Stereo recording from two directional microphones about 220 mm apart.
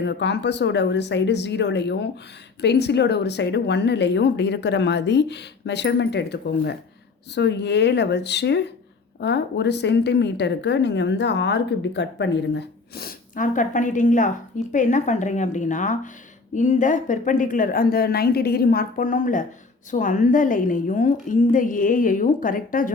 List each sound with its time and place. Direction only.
0.0 s a woman's voice: 50° left (ahead or behind)